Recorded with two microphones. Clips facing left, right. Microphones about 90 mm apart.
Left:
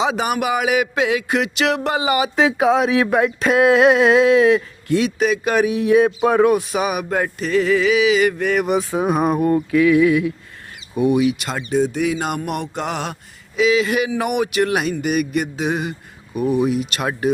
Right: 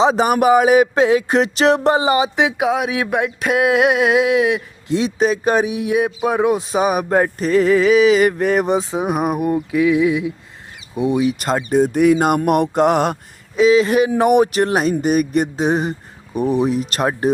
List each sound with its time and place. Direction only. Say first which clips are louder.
0.0 s speech: right 6 dB; 35° right (ahead or behind)
2.4 s a sound: left 2 dB; 10° right (ahead or behind)
4.9 s speech: right 1 dB; 30° right (ahead or behind)
5.6 s speech: left 4 dB; 15° right (ahead or behind); by 13.1 s 50° right (ahead or behind)
13.6 s speech: right 4 dB; 35° right (ahead or behind)